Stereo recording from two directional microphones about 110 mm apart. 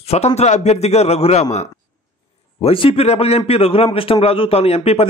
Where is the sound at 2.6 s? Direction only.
60° left (ahead or behind).